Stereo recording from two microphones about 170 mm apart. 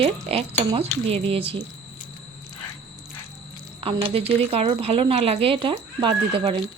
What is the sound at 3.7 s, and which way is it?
Speech, 35° right (ahead or behind).